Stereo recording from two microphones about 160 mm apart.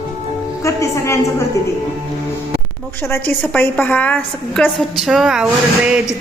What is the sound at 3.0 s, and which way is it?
A woman's voice, 10° left (ahead or behind).